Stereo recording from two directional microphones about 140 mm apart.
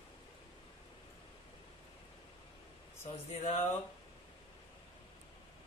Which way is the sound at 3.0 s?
45° left (ahead or behind).